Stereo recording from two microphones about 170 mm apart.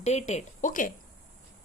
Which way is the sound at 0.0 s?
40° left (ahead or behind).